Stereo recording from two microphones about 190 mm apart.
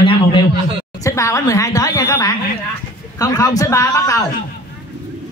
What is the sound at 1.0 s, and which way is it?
A woman's voice, 15° left (ahead or behind).